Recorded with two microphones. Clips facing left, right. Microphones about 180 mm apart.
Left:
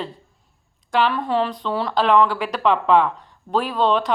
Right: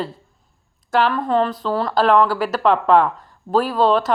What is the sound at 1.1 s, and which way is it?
Speech, centre (ahead or behind).